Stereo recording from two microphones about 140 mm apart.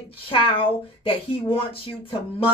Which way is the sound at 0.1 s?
40° left (ahead or behind).